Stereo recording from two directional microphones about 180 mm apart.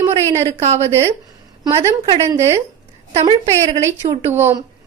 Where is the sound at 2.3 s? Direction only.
20° right (ahead or behind).